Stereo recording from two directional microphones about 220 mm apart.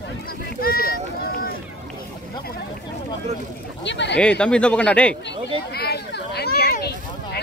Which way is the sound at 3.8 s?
55° left (ahead or behind).